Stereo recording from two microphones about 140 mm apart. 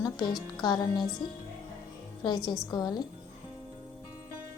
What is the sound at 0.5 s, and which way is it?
Speech, 30° left (ahead or behind).